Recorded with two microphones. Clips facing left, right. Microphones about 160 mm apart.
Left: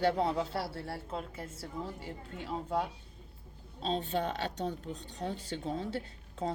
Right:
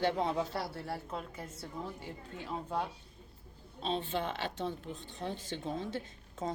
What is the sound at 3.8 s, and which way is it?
Speech, 40° left (ahead or behind).